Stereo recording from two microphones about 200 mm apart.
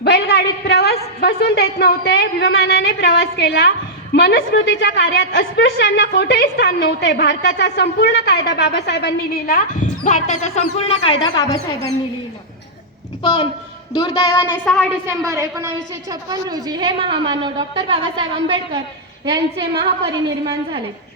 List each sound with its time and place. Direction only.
0.0 s a woman's voice: 55° left (ahead or behind); by 11.2 s 30° left (ahead or behind)
13.2 s a woman's voice: 30° left (ahead or behind); by 14.8 s 5° left (ahead or behind)
15.0 s a woman's voice: 15° right (ahead or behind)